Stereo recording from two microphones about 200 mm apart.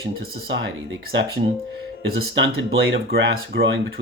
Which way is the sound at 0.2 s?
55° right (ahead or behind).